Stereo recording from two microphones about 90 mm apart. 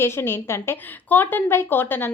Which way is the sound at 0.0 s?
30° left (ahead or behind).